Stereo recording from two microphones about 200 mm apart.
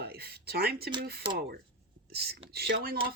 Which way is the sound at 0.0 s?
50° right (ahead or behind).